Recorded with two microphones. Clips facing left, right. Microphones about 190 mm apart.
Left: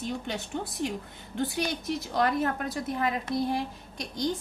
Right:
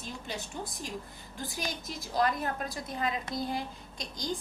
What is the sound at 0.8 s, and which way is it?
Speech, 65° left (ahead or behind).